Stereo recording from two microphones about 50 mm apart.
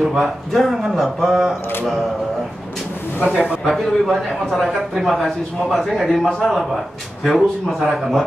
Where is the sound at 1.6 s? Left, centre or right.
Left.